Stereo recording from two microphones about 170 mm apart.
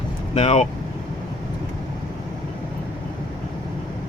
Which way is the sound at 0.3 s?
40° left (ahead or behind).